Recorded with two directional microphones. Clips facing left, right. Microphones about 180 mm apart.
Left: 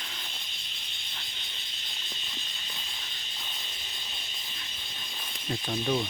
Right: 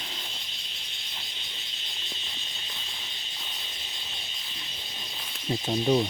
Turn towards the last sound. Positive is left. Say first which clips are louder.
# right 5 dB
turn(degrees=-25)  # may be behind; listen again after turning